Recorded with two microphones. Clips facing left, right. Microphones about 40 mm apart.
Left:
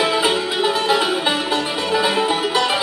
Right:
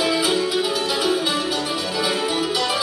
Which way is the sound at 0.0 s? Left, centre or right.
Left.